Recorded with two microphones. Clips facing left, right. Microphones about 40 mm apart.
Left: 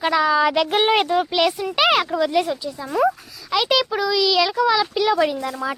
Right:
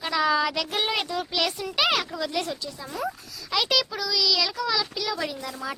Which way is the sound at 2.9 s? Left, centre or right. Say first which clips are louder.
Left 12 dB; left.